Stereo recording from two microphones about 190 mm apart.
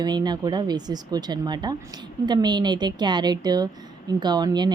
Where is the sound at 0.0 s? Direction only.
20° right (ahead or behind).